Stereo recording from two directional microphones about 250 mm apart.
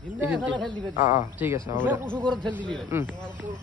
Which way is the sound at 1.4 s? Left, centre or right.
Centre.